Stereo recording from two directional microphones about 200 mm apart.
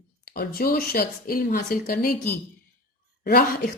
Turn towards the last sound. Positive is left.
turn(degrees=55)  # may be behind; listen again after turning